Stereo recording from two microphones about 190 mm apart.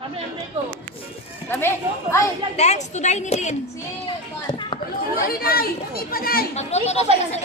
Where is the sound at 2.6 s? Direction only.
35° left (ahead or behind).